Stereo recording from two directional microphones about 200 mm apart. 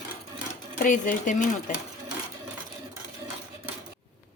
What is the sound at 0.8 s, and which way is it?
Speech, 40° left (ahead or behind).